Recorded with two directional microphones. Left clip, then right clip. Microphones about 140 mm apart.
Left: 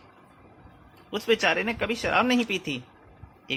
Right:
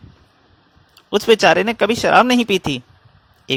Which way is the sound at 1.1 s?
75° right (ahead or behind).